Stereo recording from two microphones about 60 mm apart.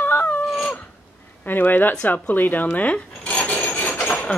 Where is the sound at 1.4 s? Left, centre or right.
Left.